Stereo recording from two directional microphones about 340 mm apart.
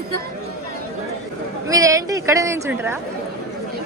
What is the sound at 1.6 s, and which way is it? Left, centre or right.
Speech, centre.